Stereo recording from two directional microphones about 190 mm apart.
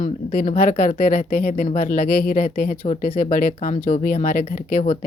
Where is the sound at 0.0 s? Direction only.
40° left (ahead or behind).